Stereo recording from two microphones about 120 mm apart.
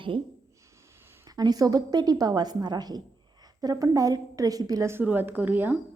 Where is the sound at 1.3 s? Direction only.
30° right (ahead or behind); by 5.8 s 15° right (ahead or behind).